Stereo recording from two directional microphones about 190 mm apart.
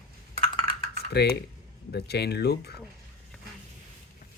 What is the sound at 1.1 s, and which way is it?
Speech, 60° left (ahead or behind).